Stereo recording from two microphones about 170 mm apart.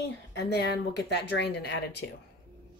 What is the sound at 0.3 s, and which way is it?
Speech, 75° left (ahead or behind).